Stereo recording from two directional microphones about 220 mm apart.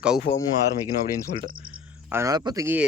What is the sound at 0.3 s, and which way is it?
Speech, 50° left (ahead or behind).